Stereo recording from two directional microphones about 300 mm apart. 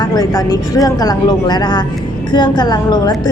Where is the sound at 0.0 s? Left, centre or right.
Centre.